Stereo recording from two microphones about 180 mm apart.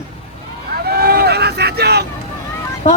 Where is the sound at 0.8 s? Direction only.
60° right (ahead or behind).